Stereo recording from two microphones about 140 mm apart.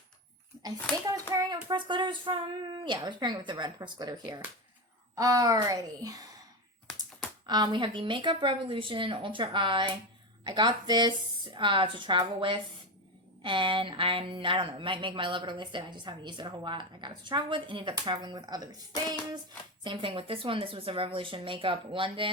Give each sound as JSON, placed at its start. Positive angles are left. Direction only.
{"t": 1.3, "sound": "a woman's voice", "side_deg": -30}
{"t": 7.4, "sound": "a woman's voice", "side_deg": -30}